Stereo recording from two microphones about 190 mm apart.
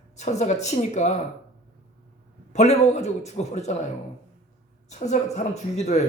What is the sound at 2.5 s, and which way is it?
Speech, 35° left (ahead or behind).